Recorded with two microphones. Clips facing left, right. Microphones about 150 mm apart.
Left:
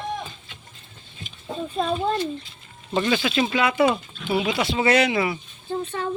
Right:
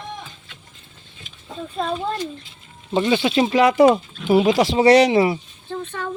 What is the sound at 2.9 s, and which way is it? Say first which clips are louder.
Speech: right 4 dB; 20° right (ahead or behind).